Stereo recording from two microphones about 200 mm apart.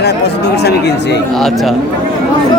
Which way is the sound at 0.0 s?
55° left (ahead or behind).